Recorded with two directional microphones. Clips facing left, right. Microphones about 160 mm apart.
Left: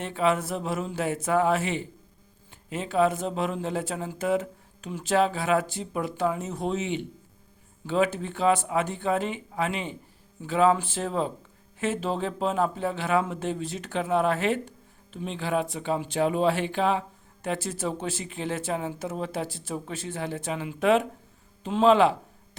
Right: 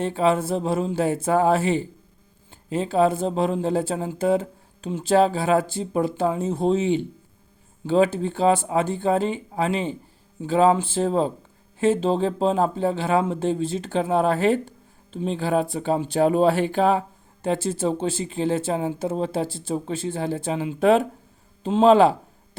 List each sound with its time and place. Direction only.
0.0 s speech: 30° right (ahead or behind)
17.4 s speech: 30° right (ahead or behind)